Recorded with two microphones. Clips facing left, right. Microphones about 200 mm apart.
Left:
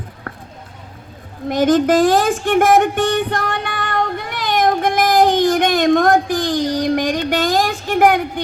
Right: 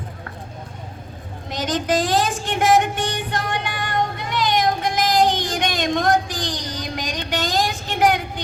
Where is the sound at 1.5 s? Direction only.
55° left (ahead or behind).